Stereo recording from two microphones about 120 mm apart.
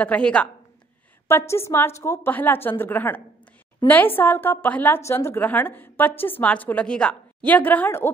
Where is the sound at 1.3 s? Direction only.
20° left (ahead or behind).